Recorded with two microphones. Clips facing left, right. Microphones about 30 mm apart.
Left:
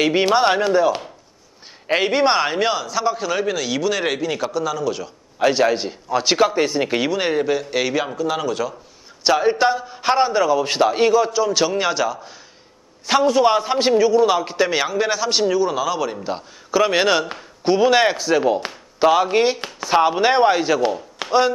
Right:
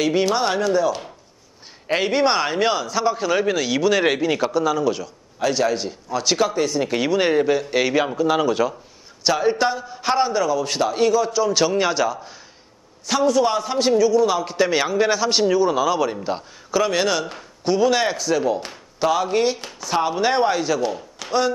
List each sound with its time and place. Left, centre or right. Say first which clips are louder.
0.0 s speech: left 3 dB; left
1.9 s a man's voice: left 2 dB; centre
5.4 s speech: left 3 dB; left
7.0 s a man's voice: right 5 dB; centre
9.2 s a man's voice: left 3 dB; centre
13.0 s a man's voice: left 3 dB; left; by 16.8 s centre
16.8 s speech: left 4 dB; left
21.2 s chop: left 5 dB; left